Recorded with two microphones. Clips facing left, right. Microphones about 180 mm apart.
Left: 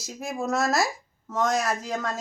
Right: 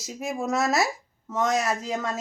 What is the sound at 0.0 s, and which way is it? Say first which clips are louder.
Speech: right 1 dB; centre (ahead or behind).